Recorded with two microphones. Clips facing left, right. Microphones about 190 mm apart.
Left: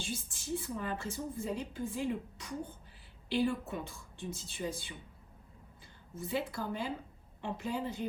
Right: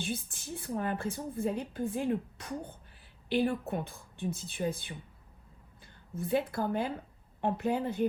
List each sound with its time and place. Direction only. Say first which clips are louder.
0.0 s a woman's voice: right 4 dB; 60° right (ahead or behind)